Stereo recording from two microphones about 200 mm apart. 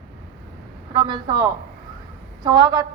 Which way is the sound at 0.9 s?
25° right (ahead or behind).